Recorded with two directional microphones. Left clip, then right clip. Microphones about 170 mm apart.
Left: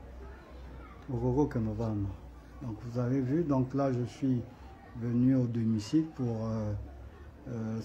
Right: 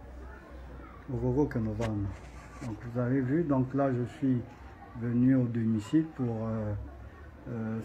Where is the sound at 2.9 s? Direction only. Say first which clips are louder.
Right 2 dB; 20° left (ahead or behind).